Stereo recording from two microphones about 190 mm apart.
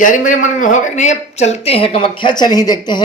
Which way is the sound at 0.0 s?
40° left (ahead or behind).